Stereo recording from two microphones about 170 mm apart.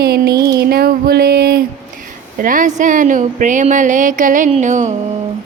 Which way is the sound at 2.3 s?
50° right (ahead or behind).